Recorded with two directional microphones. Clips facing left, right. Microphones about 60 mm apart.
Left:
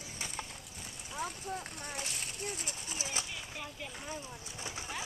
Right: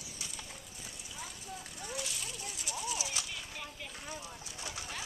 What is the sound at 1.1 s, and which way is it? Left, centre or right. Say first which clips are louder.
Speech: left 9 dB; left.